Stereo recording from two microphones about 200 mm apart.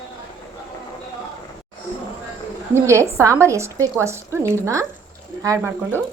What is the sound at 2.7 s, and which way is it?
Speech, 15° right (ahead or behind).